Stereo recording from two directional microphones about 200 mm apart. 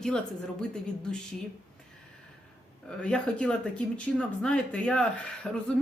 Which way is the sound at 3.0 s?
5° left (ahead or behind).